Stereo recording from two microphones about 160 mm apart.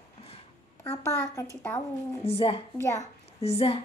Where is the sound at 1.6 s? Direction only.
15° left (ahead or behind).